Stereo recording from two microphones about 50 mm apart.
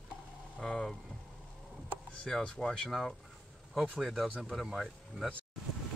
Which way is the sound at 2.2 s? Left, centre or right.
Centre.